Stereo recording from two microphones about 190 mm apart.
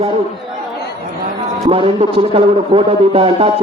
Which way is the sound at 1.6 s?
25° right (ahead or behind).